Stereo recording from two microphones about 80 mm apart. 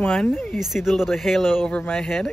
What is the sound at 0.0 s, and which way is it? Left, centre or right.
Speech, centre.